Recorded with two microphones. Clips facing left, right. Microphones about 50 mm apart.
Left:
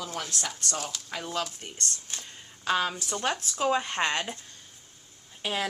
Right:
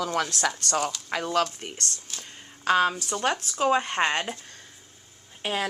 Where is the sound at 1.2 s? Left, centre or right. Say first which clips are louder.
Right 8 dB; right.